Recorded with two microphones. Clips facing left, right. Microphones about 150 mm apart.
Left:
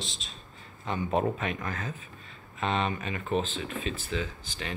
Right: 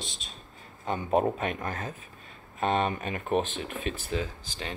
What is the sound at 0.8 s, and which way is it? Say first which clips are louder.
Speech: right 2 dB; 40° right (ahead or behind).